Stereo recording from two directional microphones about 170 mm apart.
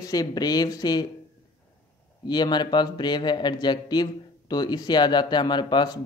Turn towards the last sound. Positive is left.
turn(degrees=25)  # may be behind; listen again after turning